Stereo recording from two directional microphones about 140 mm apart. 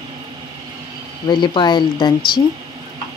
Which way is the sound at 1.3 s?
35° left (ahead or behind).